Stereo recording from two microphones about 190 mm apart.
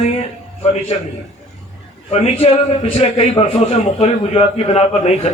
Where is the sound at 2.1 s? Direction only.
35° left (ahead or behind).